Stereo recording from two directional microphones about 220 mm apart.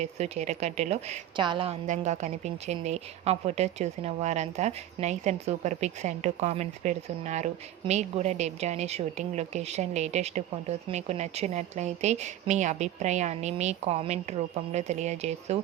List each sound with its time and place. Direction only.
0.0 s a woman's voice: 30° right (ahead or behind)